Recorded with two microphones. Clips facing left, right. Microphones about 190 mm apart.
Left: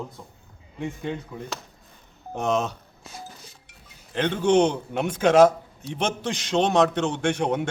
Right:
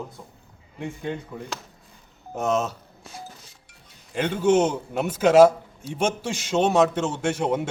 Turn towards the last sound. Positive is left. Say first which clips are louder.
# even
turn(degrees=-5)  # may be behind; listen again after turning